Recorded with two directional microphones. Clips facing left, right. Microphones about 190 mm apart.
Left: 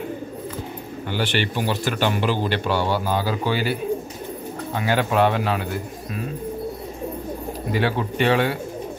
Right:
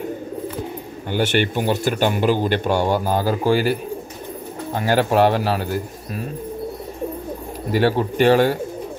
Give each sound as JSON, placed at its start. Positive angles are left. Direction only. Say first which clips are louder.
{"t": 1.1, "sound": "speech", "louder": "right 5 dB", "side_deg": -50}
{"t": 4.7, "sound": "speech", "louder": "right 3 dB", "side_deg": -40}
{"t": 7.8, "sound": "speech", "louder": "right 6 dB", "side_deg": -40}